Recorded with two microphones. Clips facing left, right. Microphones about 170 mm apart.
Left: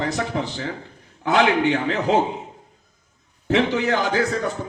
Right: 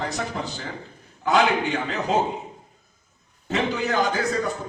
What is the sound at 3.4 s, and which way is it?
Speech, 75° left (ahead or behind).